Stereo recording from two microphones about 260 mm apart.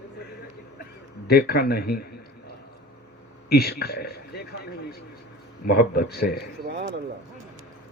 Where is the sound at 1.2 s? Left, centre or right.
Left.